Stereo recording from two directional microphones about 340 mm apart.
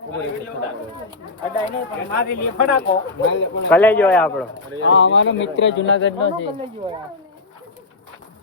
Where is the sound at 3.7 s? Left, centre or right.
Centre.